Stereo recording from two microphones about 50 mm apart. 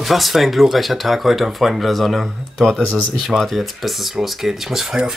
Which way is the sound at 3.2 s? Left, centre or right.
Centre.